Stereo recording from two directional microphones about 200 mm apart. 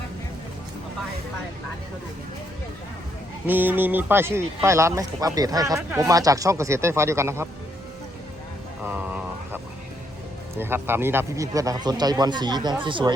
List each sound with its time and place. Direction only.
3.4 s a man's voice: 10° right (ahead or behind)
8.8 s a sound: 10° right (ahead or behind)
10.6 s a man's voice: 10° right (ahead or behind)